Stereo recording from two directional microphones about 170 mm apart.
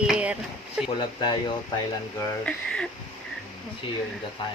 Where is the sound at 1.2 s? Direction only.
30° left (ahead or behind).